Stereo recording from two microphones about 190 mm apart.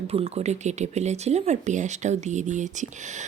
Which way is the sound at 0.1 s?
30° right (ahead or behind).